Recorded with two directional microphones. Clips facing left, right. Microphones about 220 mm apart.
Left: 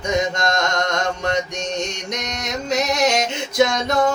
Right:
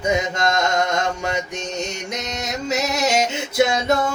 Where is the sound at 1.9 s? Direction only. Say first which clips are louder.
Even; 5° right (ahead or behind).